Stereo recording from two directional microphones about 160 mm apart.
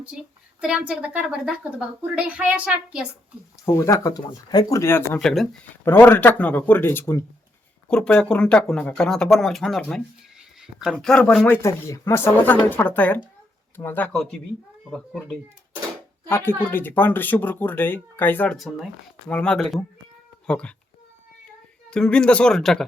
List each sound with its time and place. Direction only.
0.6 s a woman's voice: 5° right (ahead or behind)
3.8 s speech: 20° left (ahead or behind); by 5.5 s centre (ahead or behind)
5.8 s speech: 15° left (ahead or behind)
7.9 s speech: 5° left (ahead or behind)
16.3 s speech: 15° left (ahead or behind)
18.5 s speech: centre (ahead or behind)
21.8 s speech: 5° left (ahead or behind)